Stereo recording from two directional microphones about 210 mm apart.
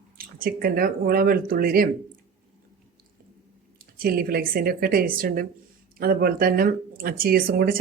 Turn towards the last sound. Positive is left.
turn(degrees=-45)  # may be behind; listen again after turning